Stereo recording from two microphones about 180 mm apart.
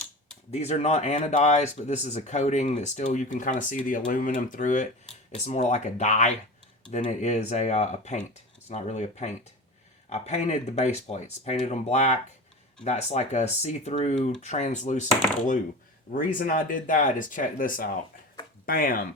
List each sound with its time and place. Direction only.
0.5 s speech: 35° left (ahead or behind)
16.1 s speech: 50° left (ahead or behind)